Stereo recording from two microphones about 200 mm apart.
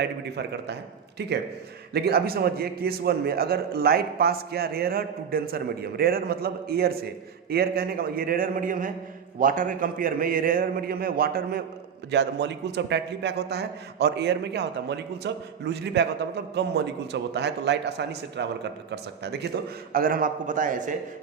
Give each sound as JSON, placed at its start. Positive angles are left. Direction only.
{"t": 0.0, "sound": "a man's voice", "side_deg": -55}
{"t": 12.1, "sound": "a man's voice", "side_deg": -60}
{"t": 19.9, "sound": "a man's voice", "side_deg": -45}